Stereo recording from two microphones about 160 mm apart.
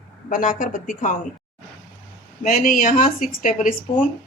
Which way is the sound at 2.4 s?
60° left (ahead or behind).